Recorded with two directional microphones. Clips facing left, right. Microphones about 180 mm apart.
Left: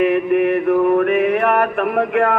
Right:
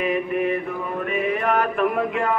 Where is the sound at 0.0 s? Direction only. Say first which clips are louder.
Left 7 dB; 65° left (ahead or behind).